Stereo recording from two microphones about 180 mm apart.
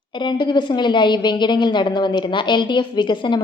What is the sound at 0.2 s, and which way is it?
A woman's voice, 25° left (ahead or behind).